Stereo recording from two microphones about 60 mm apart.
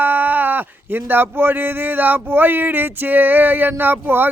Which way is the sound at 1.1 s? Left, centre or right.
Right.